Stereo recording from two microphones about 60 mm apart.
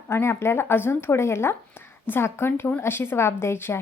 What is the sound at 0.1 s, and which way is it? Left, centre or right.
A woman's voice, left.